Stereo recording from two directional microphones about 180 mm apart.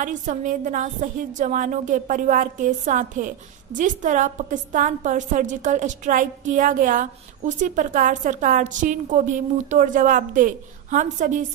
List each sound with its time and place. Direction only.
0.0 s a woman's voice: 45° right (ahead or behind)